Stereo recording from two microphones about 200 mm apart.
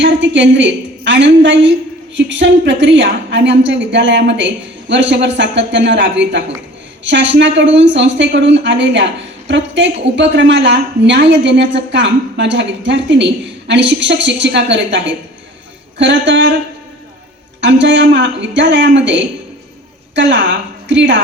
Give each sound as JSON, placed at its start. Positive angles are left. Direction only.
{"t": 0.0, "sound": "a woman's voice", "side_deg": -65}
{"t": 17.6, "sound": "a woman's voice", "side_deg": -65}